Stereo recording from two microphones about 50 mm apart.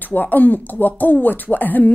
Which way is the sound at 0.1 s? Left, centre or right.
Left.